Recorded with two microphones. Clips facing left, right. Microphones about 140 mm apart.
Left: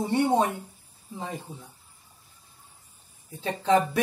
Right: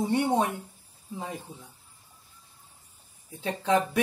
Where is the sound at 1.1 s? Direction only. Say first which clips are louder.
Left 1 dB; centre (ahead or behind).